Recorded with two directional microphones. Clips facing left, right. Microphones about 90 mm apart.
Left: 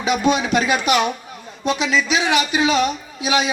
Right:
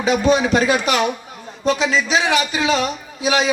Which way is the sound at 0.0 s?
35° right (ahead or behind).